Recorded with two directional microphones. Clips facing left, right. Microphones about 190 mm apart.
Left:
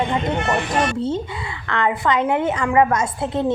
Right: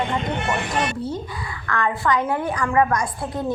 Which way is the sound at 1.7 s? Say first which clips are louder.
Left 2 dB; 20° left (ahead or behind).